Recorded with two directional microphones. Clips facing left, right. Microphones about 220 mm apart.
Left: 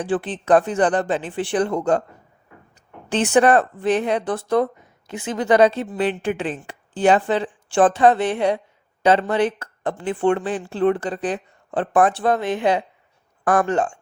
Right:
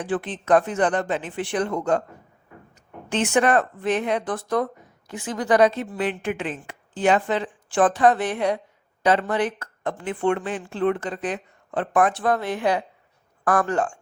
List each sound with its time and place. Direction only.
0.0 s a woman's voice: 30° left (ahead or behind)
3.1 s a woman's voice: 35° left (ahead or behind)